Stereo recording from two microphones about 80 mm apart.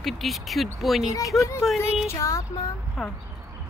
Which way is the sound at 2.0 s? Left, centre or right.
Left.